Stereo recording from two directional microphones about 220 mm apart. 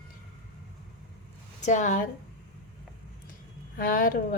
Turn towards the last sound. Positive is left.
turn(degrees=40)  # may be behind; listen again after turning